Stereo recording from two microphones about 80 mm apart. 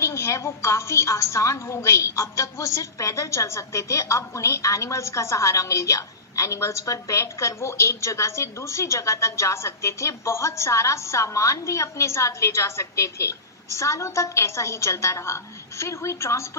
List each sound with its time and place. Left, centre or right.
0.0 s a woman's voice: left